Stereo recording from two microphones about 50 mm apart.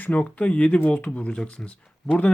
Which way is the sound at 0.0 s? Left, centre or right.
Left.